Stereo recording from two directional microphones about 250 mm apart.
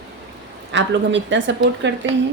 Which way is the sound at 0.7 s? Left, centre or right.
Right.